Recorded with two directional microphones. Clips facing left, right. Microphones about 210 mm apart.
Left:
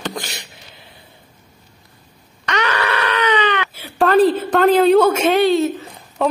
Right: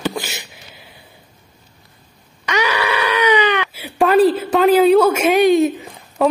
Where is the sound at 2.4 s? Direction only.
10° right (ahead or behind).